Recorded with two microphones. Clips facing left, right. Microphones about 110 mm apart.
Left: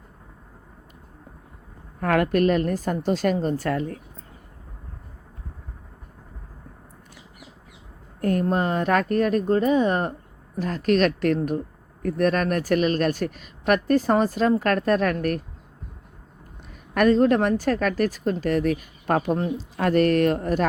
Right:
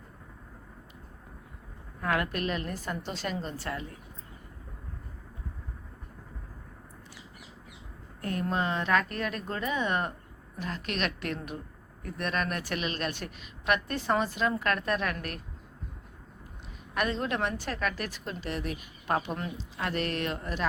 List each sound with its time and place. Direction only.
2.0 s a woman's voice: 50° left (ahead or behind)
8.2 s a woman's voice: 45° left (ahead or behind)
16.9 s a woman's voice: 45° left (ahead or behind)